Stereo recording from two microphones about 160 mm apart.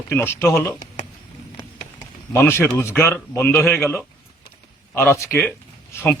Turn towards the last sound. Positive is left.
turn(degrees=15)  # may be behind; listen again after turning